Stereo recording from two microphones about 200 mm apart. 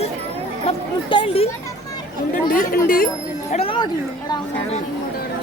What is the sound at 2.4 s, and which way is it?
Speech, 45° left (ahead or behind).